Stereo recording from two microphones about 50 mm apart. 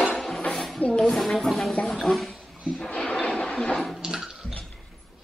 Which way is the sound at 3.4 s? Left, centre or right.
Centre.